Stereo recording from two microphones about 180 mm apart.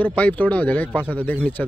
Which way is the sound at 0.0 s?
10° left (ahead or behind).